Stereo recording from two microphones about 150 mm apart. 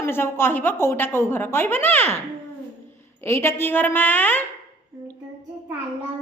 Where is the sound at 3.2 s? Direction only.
20° left (ahead or behind).